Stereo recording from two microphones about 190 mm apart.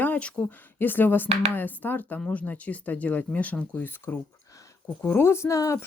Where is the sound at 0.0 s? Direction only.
5° left (ahead or behind).